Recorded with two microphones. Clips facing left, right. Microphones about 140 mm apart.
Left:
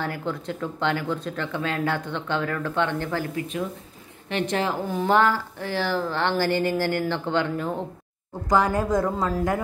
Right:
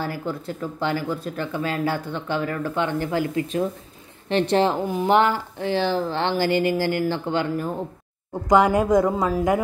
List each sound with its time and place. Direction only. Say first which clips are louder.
0.0 s speech: right 1 dB; 5° right (ahead or behind)
4.3 s a woman's voice: right 6 dB; 30° right (ahead or behind)
4.8 s speech: right 2 dB; 15° right (ahead or behind)